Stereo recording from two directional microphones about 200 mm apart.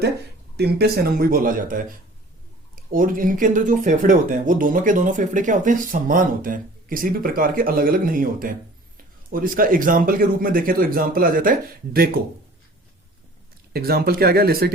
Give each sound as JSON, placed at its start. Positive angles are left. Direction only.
{"t": 0.5, "sound": "speech", "side_deg": -55}
{"t": 13.7, "sound": "speech", "side_deg": -50}